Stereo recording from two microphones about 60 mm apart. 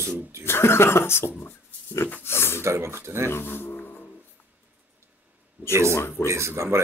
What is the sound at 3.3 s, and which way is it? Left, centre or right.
Music, left.